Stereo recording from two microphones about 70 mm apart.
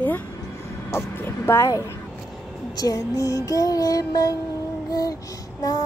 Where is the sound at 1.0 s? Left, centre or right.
Left.